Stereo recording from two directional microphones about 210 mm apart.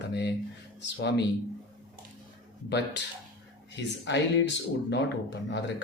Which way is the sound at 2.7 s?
55° left (ahead or behind).